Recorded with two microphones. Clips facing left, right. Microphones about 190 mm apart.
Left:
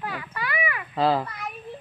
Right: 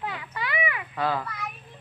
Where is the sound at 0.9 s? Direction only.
30° left (ahead or behind).